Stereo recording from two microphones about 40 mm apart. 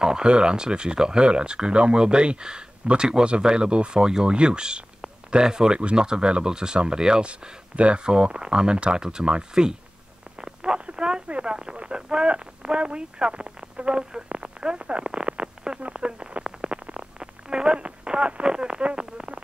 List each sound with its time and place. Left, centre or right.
0.0 s speech: right
10.4 s telephone: right
11.5 s speech: right
15.8 s a sound: right